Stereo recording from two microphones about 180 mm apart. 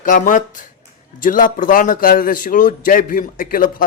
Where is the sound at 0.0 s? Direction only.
45° left (ahead or behind).